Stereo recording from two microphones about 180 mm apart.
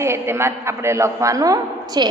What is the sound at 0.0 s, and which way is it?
A man's voice, 15° right (ahead or behind).